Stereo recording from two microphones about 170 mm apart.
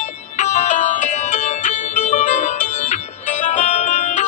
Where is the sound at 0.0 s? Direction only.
45° left (ahead or behind).